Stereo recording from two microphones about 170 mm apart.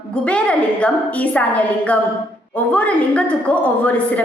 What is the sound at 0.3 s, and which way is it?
A woman's voice, 5° left (ahead or behind).